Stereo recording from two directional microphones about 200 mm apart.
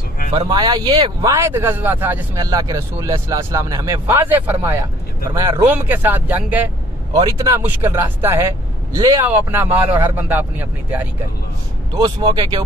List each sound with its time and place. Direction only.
0.4 s speech: 20° right (ahead or behind)
5.3 s speech: 20° right (ahead or behind)
5.7 s speech: 10° right (ahead or behind)
11.9 s speech: 20° right (ahead or behind)